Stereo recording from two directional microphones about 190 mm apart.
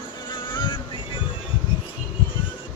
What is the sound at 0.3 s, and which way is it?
Boat, 25° left (ahead or behind).